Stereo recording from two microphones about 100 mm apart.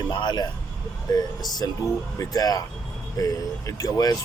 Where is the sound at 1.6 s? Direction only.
35° left (ahead or behind).